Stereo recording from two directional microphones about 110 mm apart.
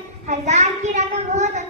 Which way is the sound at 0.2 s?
90° right.